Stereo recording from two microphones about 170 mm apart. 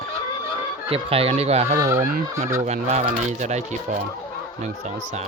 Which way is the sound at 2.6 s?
40° right (ahead or behind).